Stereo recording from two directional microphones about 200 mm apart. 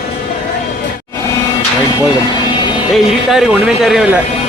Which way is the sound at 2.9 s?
5° right (ahead or behind).